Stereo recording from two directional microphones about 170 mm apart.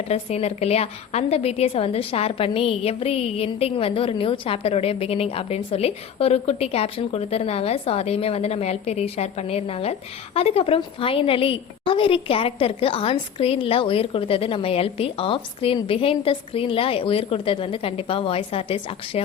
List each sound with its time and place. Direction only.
0.1 s a woman's voice: 40° left (ahead or behind)